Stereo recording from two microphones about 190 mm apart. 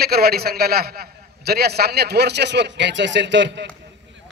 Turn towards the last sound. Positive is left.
turn(degrees=-65)  # may be behind; listen again after turning